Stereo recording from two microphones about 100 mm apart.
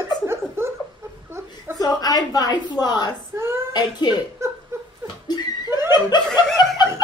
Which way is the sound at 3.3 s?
25° right (ahead or behind).